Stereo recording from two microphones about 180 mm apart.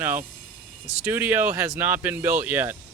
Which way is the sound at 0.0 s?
10° right (ahead or behind).